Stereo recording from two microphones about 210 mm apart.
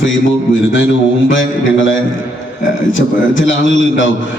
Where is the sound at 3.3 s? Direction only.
65° left (ahead or behind).